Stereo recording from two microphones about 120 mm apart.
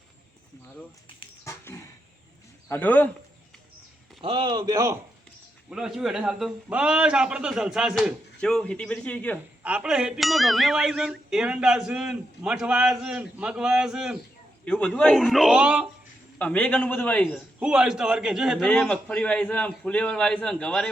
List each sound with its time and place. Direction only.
1.5 s a sound: 25° left (ahead or behind)
2.6 s speech: 15° left (ahead or behind)
4.2 s a man's voice: 45° right (ahead or behind)
5.7 s a man's voice: 5° right (ahead or behind)
9.6 s speech: 10° right (ahead or behind)
14.6 s a man's voice: 10° left (ahead or behind)
15.2 s speech: centre (ahead or behind)
16.4 s a man's voice: 10° left (ahead or behind)
17.6 s a man's voice: 10° right (ahead or behind)
18.7 s a man's voice: 10° left (ahead or behind)